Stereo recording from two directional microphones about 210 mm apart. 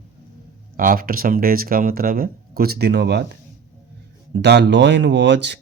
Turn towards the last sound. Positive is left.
turn(degrees=-55)  # may be behind; listen again after turning